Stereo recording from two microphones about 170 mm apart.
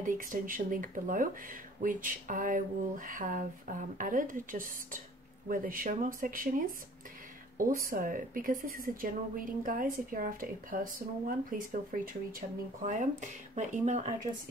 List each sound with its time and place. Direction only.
0.0 s a woman's voice: 50° right (ahead or behind)
7.5 s a woman's voice: 55° right (ahead or behind)